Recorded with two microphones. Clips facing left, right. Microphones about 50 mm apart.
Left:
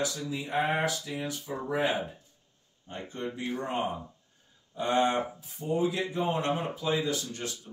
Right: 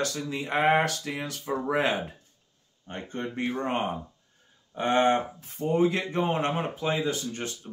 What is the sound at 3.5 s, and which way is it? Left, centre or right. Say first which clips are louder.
Speech: right 3 dB; right.